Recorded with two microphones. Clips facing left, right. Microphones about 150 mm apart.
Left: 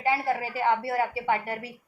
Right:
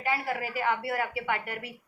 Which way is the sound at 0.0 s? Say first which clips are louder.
Left 4 dB; 30° left (ahead or behind).